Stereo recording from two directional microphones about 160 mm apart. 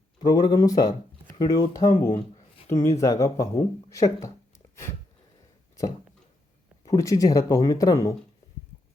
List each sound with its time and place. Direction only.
0.2 s speech: 25° left (ahead or behind)
3.8 s a sound: 20° left (ahead or behind)
6.8 s speech: 20° left (ahead or behind)